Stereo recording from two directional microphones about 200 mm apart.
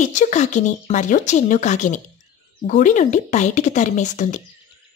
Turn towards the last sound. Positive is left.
turn(degrees=35)  # may be behind; listen again after turning